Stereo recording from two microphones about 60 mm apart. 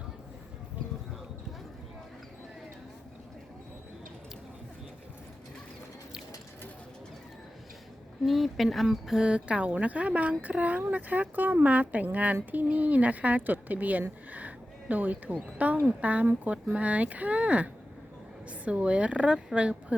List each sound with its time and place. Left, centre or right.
8.2 s speech: centre